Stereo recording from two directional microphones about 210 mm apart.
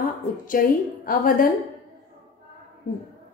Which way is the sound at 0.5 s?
40° left (ahead or behind).